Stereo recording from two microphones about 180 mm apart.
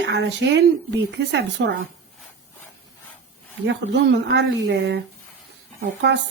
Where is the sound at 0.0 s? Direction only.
75° right (ahead or behind).